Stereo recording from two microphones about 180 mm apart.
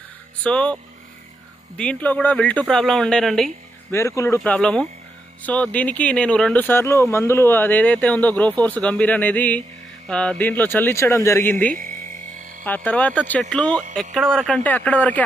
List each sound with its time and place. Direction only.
0.4 s speech: 5° left (ahead or behind)
1.8 s speech: 5° left (ahead or behind)
3.9 s speech: 15° left (ahead or behind)
4.4 s speech: 5° left (ahead or behind)
11.7 s a sound: 45° right (ahead or behind)
12.6 s speech: 10° left (ahead or behind)